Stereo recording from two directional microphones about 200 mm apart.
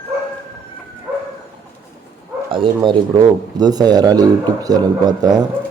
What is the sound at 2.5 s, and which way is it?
Speech, 25° right (ahead or behind).